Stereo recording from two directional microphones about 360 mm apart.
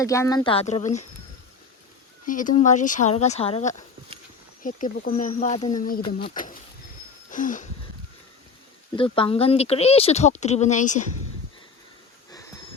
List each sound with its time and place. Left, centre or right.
0.0 s speech: centre
2.2 s speech: left
7.3 s wheeze: left
9.0 s speech: centre